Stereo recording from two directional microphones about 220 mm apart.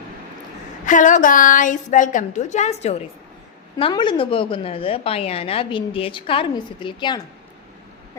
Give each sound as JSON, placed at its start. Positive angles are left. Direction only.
{"t": 0.9, "sound": "a woman's voice", "side_deg": 35}